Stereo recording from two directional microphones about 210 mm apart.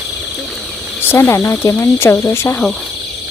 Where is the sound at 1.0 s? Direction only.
10° left (ahead or behind).